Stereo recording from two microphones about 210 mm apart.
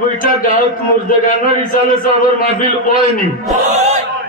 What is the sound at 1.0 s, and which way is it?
A man's voice, 40° left (ahead or behind).